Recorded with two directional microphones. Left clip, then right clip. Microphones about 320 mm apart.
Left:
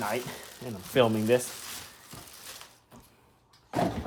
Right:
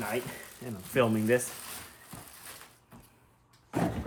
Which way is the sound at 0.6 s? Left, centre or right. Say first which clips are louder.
Left 3 dB; centre.